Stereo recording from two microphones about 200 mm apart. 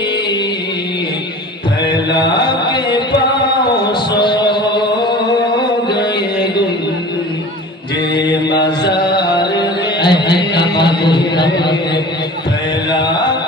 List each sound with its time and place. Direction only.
2.1 s mantra: 20° left (ahead or behind)
4.1 s a sound: 20° left (ahead or behind)
5.9 s mantra: 20° left (ahead or behind)
8.2 s mantra: 20° left (ahead or behind)
8.8 s carnatic music: 20° left (ahead or behind)
10.3 s a sound: 25° left (ahead or behind)
12.9 s mantra: 20° left (ahead or behind)